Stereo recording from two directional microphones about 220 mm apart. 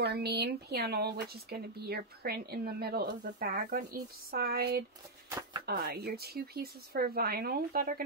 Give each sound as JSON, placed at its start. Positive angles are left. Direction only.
{"t": 0.0, "sound": "speech", "side_deg": -50}